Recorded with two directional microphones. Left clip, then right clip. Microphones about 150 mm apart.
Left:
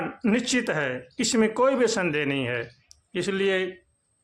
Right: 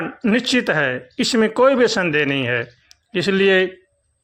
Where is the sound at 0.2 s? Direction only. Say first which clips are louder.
Right 7 dB; 25° right (ahead or behind).